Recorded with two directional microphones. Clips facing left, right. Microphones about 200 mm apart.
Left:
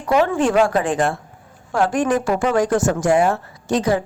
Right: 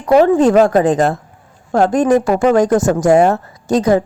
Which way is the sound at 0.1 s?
40° right (ahead or behind).